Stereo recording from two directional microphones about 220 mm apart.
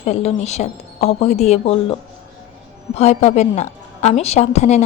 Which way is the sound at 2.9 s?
30° left (ahead or behind).